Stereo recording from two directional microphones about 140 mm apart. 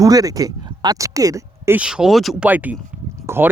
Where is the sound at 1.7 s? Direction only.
5° right (ahead or behind).